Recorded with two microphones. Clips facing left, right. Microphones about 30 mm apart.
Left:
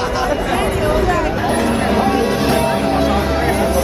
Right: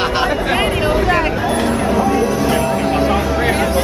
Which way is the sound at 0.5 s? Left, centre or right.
Right.